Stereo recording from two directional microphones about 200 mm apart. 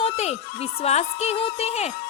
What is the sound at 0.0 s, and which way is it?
Speech, 30° left (ahead or behind).